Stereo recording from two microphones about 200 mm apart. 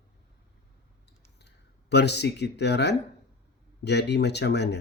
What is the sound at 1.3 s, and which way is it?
Speech, 55° left (ahead or behind).